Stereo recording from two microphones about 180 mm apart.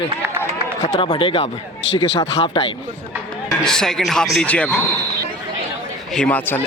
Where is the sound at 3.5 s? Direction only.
5° left (ahead or behind).